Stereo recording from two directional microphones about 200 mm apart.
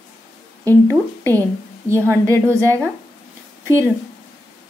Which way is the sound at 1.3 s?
15° right (ahead or behind).